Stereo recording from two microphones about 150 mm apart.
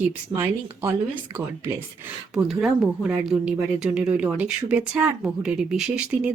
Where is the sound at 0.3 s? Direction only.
15° right (ahead or behind).